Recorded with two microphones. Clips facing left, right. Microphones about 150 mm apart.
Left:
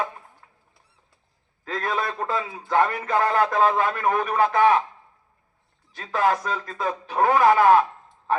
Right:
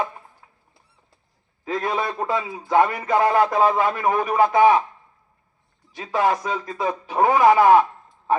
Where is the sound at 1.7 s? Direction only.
10° right (ahead or behind).